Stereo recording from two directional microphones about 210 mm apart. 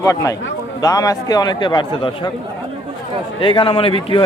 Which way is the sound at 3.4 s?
25° left (ahead or behind).